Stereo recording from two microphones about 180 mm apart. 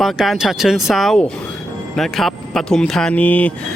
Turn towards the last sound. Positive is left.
turn(degrees=10)  # may be behind; listen again after turning